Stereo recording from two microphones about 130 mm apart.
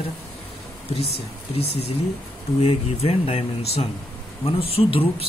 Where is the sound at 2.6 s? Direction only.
50° left (ahead or behind).